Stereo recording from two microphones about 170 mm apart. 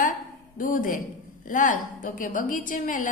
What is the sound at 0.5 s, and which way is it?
A woman's voice, 55° left (ahead or behind).